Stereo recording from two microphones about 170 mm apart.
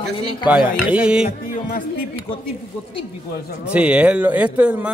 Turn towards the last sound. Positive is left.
turn(degrees=-5)  # may be behind; listen again after turning